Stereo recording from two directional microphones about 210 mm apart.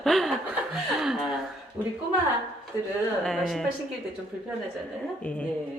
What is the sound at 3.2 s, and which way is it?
Chuckle, centre (ahead or behind).